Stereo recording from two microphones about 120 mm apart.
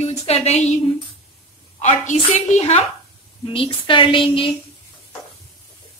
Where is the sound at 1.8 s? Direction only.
90° left.